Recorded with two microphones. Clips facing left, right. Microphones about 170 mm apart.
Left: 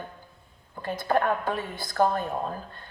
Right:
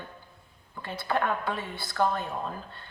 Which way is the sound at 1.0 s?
45° left (ahead or behind).